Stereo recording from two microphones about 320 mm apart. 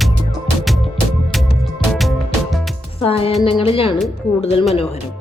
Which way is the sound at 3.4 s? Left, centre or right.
Centre.